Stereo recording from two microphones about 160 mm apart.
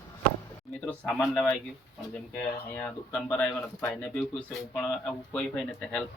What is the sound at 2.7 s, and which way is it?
Speech, 10° left (ahead or behind).